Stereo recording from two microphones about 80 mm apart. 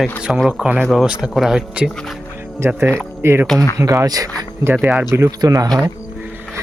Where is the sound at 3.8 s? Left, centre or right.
Right.